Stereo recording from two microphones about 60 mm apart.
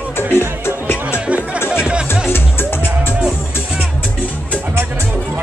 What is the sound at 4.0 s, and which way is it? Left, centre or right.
Music, left.